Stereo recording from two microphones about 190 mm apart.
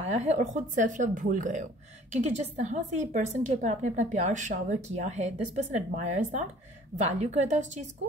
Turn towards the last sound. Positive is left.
turn(degrees=-40)  # may be behind; listen again after turning